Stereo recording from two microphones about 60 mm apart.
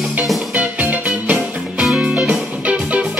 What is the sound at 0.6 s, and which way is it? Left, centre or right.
Music, right.